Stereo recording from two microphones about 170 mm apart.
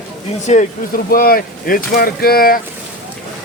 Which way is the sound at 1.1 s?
60° left (ahead or behind).